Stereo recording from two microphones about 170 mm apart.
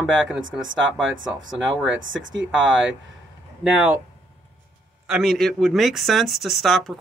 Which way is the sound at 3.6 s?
10° right (ahead or behind).